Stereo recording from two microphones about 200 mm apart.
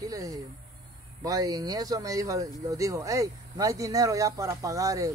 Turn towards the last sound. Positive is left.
turn(degrees=-15)  # may be behind; listen again after turning